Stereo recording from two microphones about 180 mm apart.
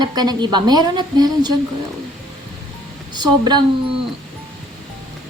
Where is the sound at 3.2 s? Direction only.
25° right (ahead or behind).